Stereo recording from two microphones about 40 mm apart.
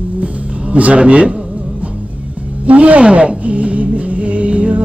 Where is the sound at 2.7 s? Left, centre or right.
Right.